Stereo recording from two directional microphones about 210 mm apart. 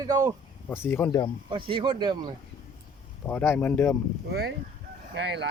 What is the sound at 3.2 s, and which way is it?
Speech, 10° left (ahead or behind).